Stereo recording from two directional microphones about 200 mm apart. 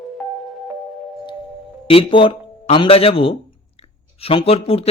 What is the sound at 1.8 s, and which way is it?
A man's voice, 25° left (ahead or behind).